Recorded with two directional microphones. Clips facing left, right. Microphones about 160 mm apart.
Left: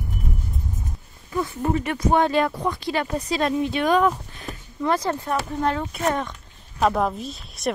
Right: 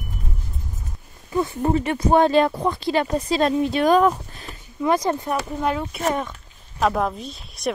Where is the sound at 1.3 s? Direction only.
30° right (ahead or behind).